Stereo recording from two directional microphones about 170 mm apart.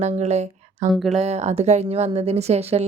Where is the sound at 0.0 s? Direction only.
40° right (ahead or behind).